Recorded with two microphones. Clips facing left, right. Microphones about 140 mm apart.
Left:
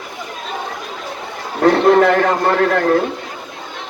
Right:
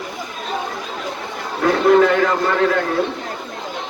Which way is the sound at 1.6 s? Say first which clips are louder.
Left 2 dB; 55° left (ahead or behind).